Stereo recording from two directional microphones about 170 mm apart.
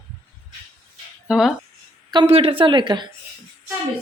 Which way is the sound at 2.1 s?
30° right (ahead or behind).